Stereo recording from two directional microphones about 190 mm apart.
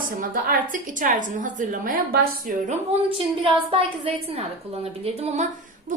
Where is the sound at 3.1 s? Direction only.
30° right (ahead or behind).